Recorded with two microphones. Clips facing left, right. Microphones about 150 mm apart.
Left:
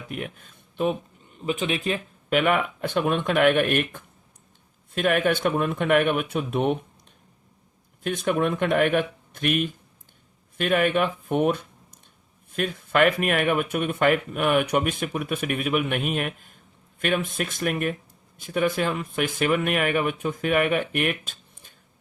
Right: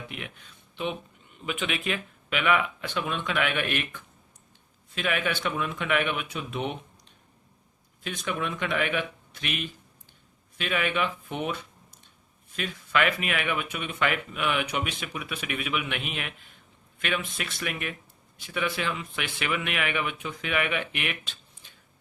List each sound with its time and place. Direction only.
0.1 s speech: 45° left (ahead or behind)
8.0 s speech: 50° left (ahead or behind)